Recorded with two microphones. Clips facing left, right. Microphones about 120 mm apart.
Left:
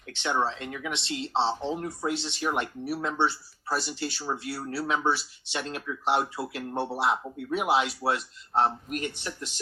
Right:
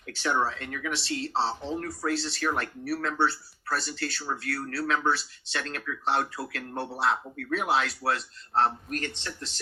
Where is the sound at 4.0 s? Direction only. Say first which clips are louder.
Left 1 dB; 25° left (ahead or behind).